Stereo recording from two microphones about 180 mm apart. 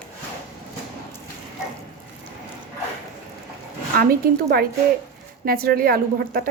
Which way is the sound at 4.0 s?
55° right (ahead or behind).